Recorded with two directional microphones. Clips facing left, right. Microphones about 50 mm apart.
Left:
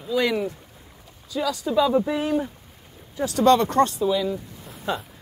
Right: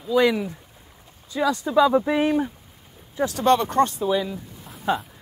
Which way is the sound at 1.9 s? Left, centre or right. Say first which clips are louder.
Right 1 dB; centre.